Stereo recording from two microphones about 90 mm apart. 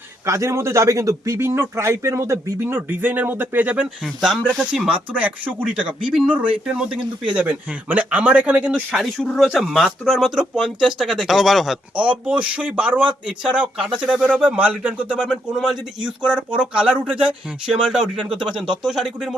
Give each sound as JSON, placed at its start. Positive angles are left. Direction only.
{"t": 0.3, "sound": "a man's voice", "side_deg": -35}
{"t": 4.0, "sound": "speech", "side_deg": 0}
{"t": 4.9, "sound": "speech", "side_deg": -15}
{"t": 9.1, "sound": "speech", "side_deg": 0}
{"t": 11.9, "sound": "speech", "side_deg": -15}
{"t": 18.6, "sound": "speech", "side_deg": -60}
{"t": 18.9, "sound": "speech", "side_deg": -5}